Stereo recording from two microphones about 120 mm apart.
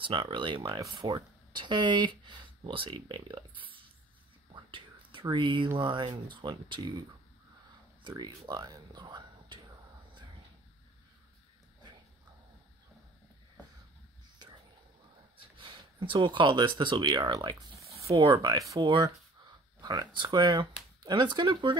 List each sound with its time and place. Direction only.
0.0 s speech: 45° right (ahead or behind)
4.6 s whispering: 45° right (ahead or behind)
5.3 s speech: 40° right (ahead or behind)
8.5 s speech: 35° right (ahead or behind)
15.3 s speech: 45° right (ahead or behind)